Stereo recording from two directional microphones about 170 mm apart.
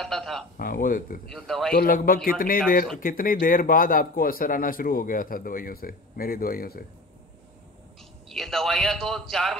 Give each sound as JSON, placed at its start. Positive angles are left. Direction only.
{"t": 0.0, "sound": "a man's voice", "side_deg": 0}
{"t": 0.6, "sound": "a man's voice", "side_deg": 55}
{"t": 1.3, "sound": "a man's voice", "side_deg": 0}
{"t": 1.7, "sound": "a man's voice", "side_deg": 60}
{"t": 8.3, "sound": "a man's voice", "side_deg": 0}